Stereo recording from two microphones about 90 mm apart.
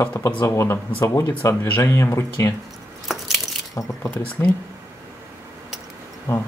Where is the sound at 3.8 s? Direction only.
35° left (ahead or behind).